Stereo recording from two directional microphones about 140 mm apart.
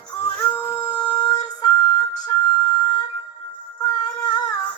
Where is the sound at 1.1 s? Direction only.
30° left (ahead or behind).